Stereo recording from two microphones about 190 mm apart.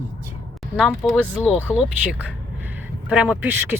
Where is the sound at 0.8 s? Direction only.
5° left (ahead or behind).